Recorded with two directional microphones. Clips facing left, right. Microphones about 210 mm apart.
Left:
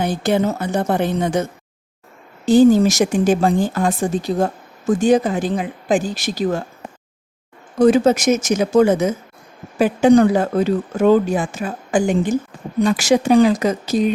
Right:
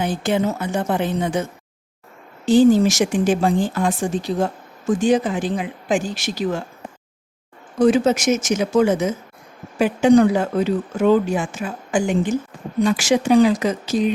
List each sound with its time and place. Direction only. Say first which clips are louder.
0.0 s speech: left 2 dB; 40° left (ahead or behind)
2.5 s speech: left 2 dB; 40° left (ahead or behind)
7.8 s speech: left 3 dB; 40° left (ahead or behind)